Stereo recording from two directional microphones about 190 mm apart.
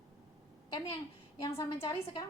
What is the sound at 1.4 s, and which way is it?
Speech, 20° left (ahead or behind).